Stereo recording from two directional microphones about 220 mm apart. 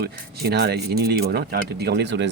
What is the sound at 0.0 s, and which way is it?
Speech, 45° right (ahead or behind).